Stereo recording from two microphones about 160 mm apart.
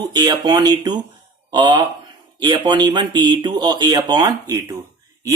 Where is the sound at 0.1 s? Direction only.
25° right (ahead or behind).